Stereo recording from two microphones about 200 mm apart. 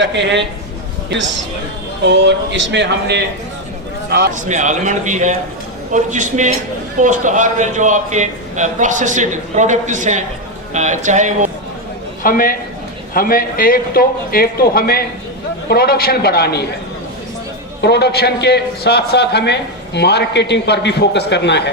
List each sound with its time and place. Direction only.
0.0 s speech: 60° right (ahead or behind)
2.0 s a man's voice: 60° right (ahead or behind)
4.4 s a man's voice: 35° right (ahead or behind)
12.2 s a man's voice: 45° left (ahead or behind)
17.8 s a man's voice: 55° left (ahead or behind)